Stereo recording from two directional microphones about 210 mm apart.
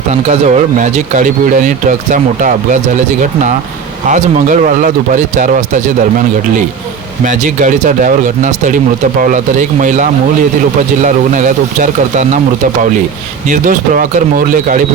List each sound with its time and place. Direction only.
0.1 s speech: 35° right (ahead or behind)
4.1 s speech: 35° right (ahead or behind)
7.3 s speech: 40° right (ahead or behind)
13.5 s speech: 40° right (ahead or behind)